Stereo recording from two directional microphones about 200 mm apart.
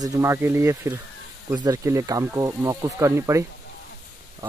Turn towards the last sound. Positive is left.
turn(degrees=-15)  # may be behind; listen again after turning